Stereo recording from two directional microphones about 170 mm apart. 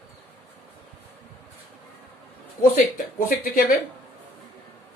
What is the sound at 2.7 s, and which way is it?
Speech, 55° left (ahead or behind).